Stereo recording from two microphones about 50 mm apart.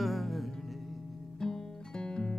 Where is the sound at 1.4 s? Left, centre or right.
Centre.